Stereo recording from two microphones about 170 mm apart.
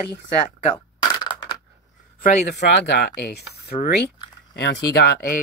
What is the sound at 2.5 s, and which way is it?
Speech, 90° left.